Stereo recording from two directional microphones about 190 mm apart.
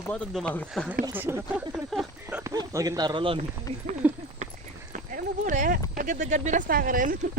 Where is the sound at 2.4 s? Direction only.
15° right (ahead or behind).